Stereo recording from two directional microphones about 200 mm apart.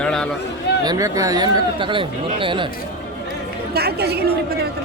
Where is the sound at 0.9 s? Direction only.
15° right (ahead or behind).